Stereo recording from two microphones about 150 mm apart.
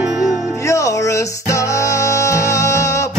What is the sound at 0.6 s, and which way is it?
Music, 20° left (ahead or behind).